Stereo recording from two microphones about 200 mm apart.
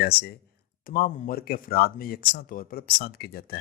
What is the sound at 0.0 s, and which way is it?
Speech, 50° left (ahead or behind).